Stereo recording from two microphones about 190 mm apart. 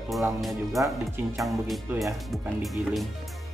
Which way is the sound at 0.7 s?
15° right (ahead or behind).